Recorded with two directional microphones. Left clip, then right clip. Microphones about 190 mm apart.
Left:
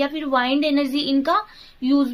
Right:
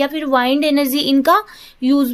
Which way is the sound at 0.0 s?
35° right (ahead or behind).